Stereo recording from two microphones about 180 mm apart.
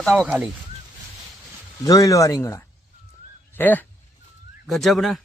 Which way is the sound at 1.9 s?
20° left (ahead or behind).